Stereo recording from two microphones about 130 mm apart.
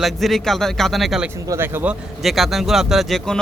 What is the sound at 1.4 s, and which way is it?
Speech, 20° right (ahead or behind).